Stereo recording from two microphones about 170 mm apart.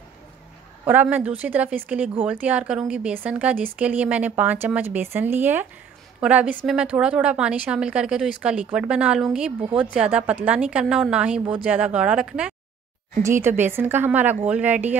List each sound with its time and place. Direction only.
0.8 s speech: 10° right (ahead or behind)